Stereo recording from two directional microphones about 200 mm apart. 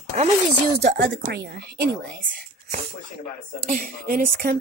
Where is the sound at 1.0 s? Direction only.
60° right (ahead or behind).